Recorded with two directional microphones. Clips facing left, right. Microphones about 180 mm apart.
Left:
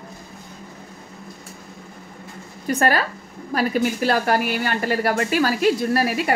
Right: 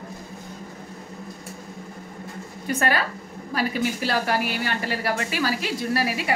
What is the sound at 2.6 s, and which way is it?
A woman's voice, 40° left (ahead or behind).